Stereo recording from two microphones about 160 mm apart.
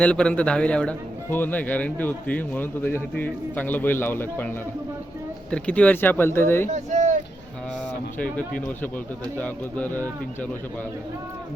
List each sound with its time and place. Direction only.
0.0 s a man's voice: 5° left (ahead or behind)
6.7 s speech: 45° right (ahead or behind)
8.2 s a man's voice: 10° left (ahead or behind)